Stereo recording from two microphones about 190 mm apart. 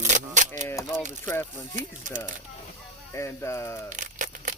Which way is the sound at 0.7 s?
15° left (ahead or behind).